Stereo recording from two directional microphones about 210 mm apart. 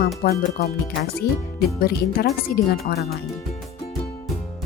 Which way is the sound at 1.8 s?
45° left (ahead or behind).